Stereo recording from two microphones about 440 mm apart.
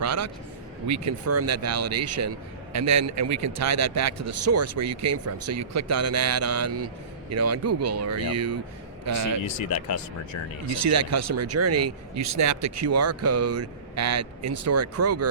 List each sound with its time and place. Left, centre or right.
0.0 s a sound: right
0.9 s speech: right
9.6 s speech: left
10.7 s speech: right